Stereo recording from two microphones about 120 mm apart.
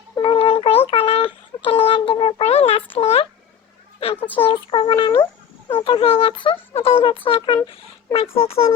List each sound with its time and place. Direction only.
0.2 s a sound: 45° left (ahead or behind)
4.4 s speech: 45° left (ahead or behind)
5.1 s dog: 20° left (ahead or behind)
5.8 s speech: 50° left (ahead or behind)